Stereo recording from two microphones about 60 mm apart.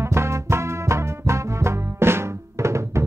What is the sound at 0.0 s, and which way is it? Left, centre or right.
Music, right.